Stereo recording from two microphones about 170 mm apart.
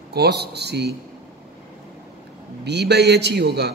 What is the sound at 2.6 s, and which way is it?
A man's voice, 80° right.